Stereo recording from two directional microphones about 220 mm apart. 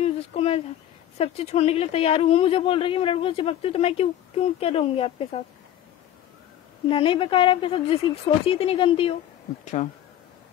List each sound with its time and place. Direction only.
0.0 s a sound: 25° left (ahead or behind)
1.1 s speech: 25° left (ahead or behind)
6.9 s speech: 25° left (ahead or behind)